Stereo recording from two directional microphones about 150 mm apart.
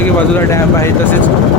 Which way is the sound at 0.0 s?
15° left (ahead or behind).